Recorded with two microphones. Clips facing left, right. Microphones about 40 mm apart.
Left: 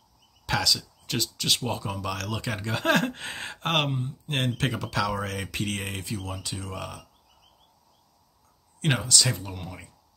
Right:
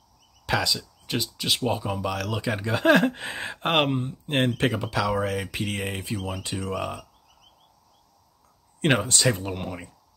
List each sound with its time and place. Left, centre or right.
0.5 s speech: centre
6.0 s speech: centre
6.3 s speech: right
8.8 s speech: right